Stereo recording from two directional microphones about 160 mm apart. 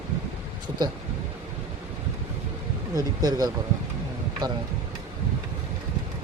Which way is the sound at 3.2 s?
25° right (ahead or behind).